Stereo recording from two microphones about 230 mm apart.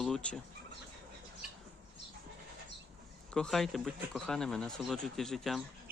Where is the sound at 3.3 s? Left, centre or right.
Centre.